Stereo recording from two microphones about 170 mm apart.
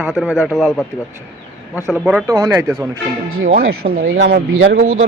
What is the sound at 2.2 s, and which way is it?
Speech, 15° right (ahead or behind).